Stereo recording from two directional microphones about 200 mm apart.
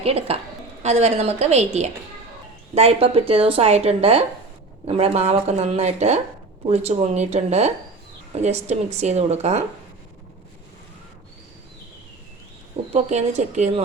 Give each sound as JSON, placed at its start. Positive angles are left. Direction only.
{"t": 0.0, "sound": "a woman's voice", "side_deg": -30}
{"t": 12.9, "sound": "speech", "side_deg": -35}